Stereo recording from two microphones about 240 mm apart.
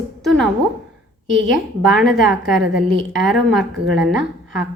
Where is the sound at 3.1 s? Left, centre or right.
Centre.